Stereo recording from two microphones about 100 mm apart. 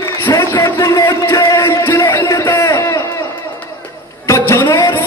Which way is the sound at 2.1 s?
35° left (ahead or behind).